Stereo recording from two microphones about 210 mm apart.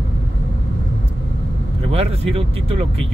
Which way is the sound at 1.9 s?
30° right (ahead or behind).